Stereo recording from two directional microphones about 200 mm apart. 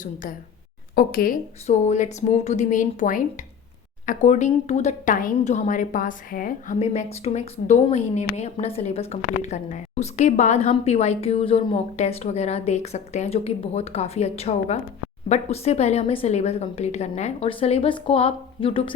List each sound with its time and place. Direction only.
0.0 s a woman's voice: 40° left (ahead or behind)
1.6 s a woman's voice: 35° left (ahead or behind)